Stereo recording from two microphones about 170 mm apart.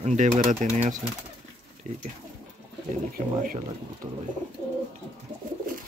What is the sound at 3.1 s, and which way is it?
Speech, 60° right (ahead or behind).